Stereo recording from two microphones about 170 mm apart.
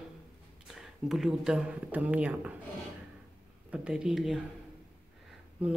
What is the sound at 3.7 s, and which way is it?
Speech, 5° right (ahead or behind).